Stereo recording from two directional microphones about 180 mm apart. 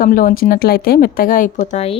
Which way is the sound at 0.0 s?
50° left (ahead or behind).